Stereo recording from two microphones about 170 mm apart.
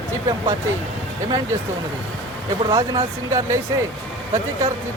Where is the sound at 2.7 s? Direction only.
25° right (ahead or behind).